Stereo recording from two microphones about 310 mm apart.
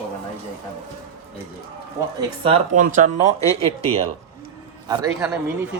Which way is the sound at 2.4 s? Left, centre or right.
Right.